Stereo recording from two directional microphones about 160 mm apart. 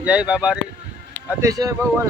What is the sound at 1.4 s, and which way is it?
Speech, 20° right (ahead or behind).